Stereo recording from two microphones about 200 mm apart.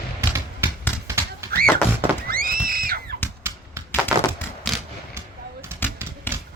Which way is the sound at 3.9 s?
Centre (ahead or behind).